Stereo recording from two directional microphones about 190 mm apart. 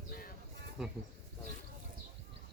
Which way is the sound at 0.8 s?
Centre (ahead or behind).